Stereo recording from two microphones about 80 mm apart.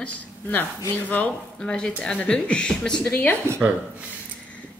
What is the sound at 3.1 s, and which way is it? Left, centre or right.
Speech, left.